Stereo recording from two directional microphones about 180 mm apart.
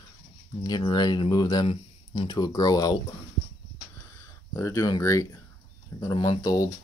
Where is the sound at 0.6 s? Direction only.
25° left (ahead or behind).